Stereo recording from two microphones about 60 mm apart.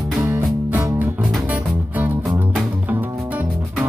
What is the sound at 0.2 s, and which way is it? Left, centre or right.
Music, right.